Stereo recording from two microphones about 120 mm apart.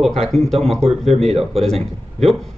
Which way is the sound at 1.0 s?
60° right (ahead or behind).